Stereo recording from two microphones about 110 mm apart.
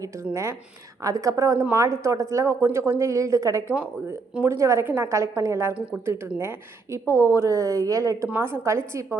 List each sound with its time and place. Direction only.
0.0 s a woman's voice: 25° right (ahead or behind)
8.3 s a woman's voice: 20° right (ahead or behind)